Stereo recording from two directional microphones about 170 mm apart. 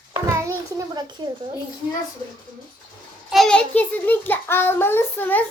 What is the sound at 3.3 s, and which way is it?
A child's voice, centre (ahead or behind).